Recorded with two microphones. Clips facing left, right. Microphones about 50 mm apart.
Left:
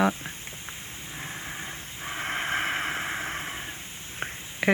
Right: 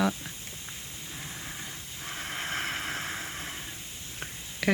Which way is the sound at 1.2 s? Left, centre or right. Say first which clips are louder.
Left 5 dB; left.